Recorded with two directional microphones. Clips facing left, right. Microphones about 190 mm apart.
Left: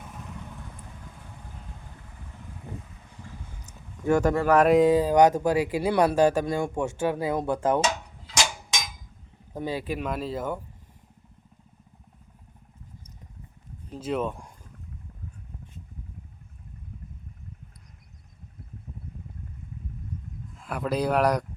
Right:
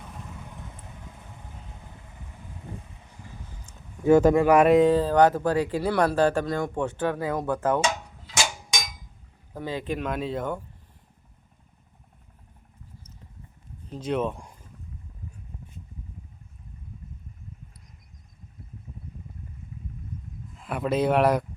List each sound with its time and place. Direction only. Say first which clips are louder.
4.0 s speech: right 5 dB; 20° right (ahead or behind)
4.6 s speech: right 1 dB; 5° left (ahead or behind)
9.6 s speech: even; 10° left (ahead or behind)
13.9 s speech: right 1 dB; 5° left (ahead or behind)
20.6 s speech: right 2 dB; centre (ahead or behind)